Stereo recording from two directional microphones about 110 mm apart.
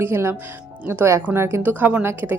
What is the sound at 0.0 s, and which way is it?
Speech, 20° right (ahead or behind).